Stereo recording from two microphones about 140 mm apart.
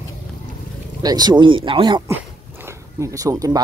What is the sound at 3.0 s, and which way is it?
Speech, 25° right (ahead or behind).